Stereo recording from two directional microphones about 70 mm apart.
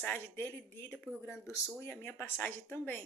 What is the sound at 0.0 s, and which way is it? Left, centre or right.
Speech, left.